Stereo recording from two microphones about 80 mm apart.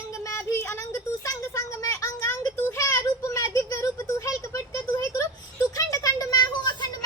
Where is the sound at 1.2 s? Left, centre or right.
Left.